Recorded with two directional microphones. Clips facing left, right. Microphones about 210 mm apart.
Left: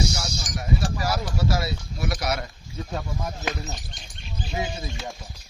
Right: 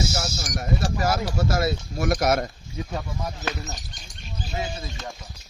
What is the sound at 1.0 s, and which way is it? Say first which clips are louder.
Speech: right 2 dB; 50° right (ahead or behind).